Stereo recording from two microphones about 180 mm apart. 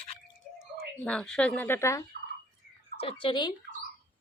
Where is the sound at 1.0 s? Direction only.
5° left (ahead or behind).